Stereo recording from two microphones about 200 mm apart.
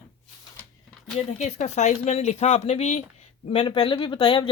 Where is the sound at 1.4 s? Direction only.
35° left (ahead or behind).